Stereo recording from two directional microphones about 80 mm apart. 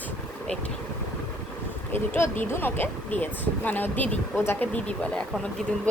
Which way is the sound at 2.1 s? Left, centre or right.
Left.